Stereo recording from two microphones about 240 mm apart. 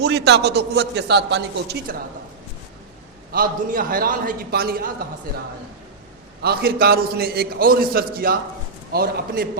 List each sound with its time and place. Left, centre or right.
0.0 s a man's voice: right
3.3 s a man's voice: right
6.4 s a man's voice: right